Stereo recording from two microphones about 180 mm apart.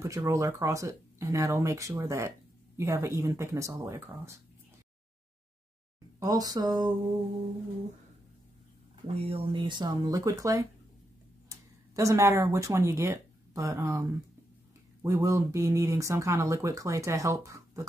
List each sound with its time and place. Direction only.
0.0 s speech: 15° right (ahead or behind)
6.1 s speech: 20° right (ahead or behind)
9.0 s speech: 30° right (ahead or behind)